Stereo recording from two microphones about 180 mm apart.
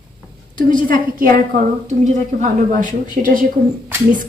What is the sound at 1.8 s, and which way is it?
A woman's voice, 40° right (ahead or behind).